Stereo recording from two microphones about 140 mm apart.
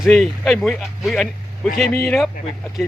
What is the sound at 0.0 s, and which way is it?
Speech, centre (ahead or behind).